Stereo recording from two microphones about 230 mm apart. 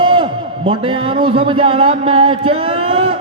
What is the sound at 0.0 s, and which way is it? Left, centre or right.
A man's voice, right.